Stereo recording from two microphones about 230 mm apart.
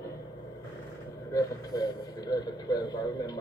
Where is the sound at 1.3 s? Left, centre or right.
Centre.